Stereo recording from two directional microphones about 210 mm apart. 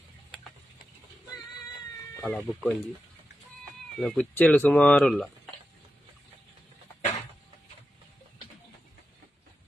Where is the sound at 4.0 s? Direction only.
5° left (ahead or behind).